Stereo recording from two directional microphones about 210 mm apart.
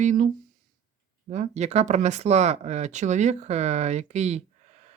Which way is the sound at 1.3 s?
35° right (ahead or behind).